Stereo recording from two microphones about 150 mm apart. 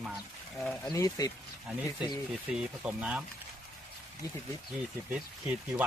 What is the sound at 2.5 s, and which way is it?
Speech, 5° right (ahead or behind).